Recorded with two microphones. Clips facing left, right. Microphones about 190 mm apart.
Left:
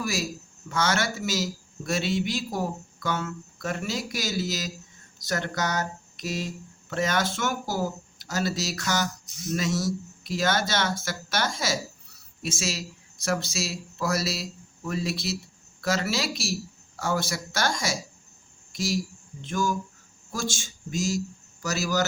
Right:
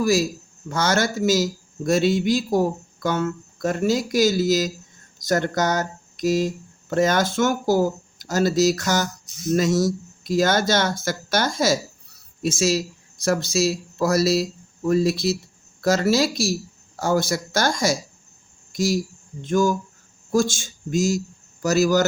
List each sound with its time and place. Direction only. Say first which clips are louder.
0.0 s a man's voice: right 10 dB; 40° right (ahead or behind)